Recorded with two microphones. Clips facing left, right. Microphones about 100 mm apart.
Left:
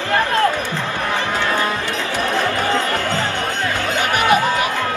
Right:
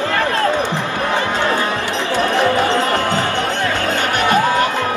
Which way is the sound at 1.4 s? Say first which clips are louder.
Right 2 dB; 15° right (ahead or behind).